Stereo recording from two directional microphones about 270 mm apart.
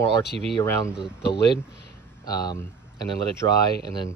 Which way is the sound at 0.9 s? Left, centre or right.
Centre.